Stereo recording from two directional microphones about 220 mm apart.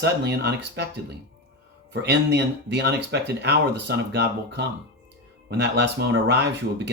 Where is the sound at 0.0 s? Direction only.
50° right (ahead or behind).